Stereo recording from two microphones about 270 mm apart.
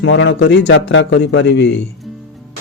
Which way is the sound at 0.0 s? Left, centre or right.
Left.